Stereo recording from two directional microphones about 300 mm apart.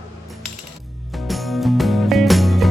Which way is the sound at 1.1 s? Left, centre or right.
Centre.